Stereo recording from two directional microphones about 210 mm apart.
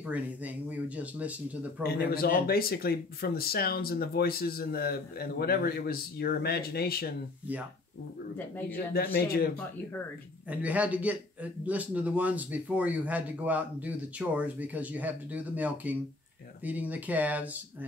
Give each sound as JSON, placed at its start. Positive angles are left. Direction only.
{"t": 0.7, "sound": "a man's voice", "side_deg": -5}
{"t": 1.8, "sound": "speech", "side_deg": 45}
{"t": 8.7, "sound": "speech", "side_deg": 45}
{"t": 10.5, "sound": "a man's voice", "side_deg": -5}